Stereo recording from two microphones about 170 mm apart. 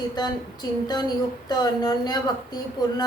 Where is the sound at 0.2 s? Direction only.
25° left (ahead or behind).